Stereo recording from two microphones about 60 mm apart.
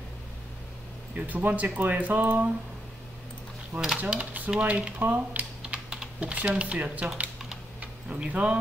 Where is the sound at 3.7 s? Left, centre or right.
Right.